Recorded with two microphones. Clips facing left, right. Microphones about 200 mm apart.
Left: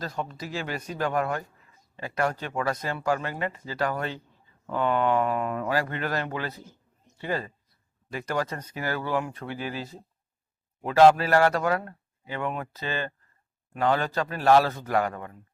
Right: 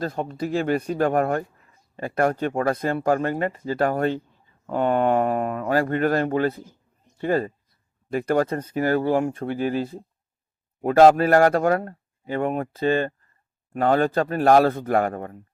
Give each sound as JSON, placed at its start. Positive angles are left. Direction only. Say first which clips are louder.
{"t": 0.0, "sound": "speech", "louder": "right 7 dB", "side_deg": -50}